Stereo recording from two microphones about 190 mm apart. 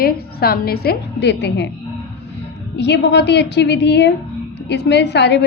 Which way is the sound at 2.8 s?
65° left (ahead or behind).